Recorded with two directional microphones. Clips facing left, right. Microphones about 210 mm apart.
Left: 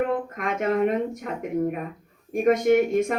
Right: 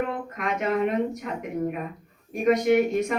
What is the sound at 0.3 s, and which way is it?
Speech, 50° left (ahead or behind).